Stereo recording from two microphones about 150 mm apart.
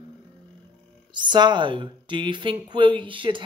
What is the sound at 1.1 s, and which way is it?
Speech, 30° right (ahead or behind).